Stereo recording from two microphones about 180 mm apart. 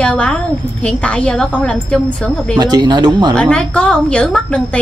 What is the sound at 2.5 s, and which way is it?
Speech, 25° right (ahead or behind).